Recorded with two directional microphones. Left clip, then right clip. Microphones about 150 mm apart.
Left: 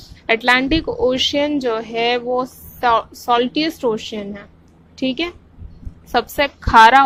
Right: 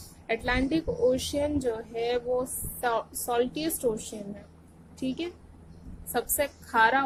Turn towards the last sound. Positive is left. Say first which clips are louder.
# left 14 dB
turn(degrees=45)  # may be behind; listen again after turning